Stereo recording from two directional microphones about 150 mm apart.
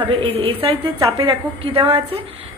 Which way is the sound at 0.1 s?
35° right (ahead or behind).